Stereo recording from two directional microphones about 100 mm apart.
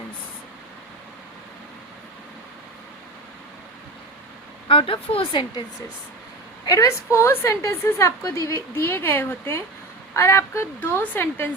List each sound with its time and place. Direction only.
4.7 s a woman's voice: 65° left (ahead or behind)
6.7 s a woman's voice: 30° left (ahead or behind)